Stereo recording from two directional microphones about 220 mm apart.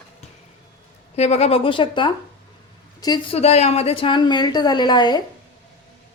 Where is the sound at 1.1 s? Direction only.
30° left (ahead or behind).